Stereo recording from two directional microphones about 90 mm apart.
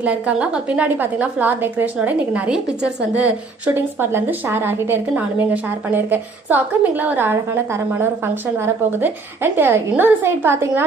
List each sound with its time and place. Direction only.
0.0 s a woman's voice: 15° right (ahead or behind)
3.7 s a woman's voice: 25° right (ahead or behind)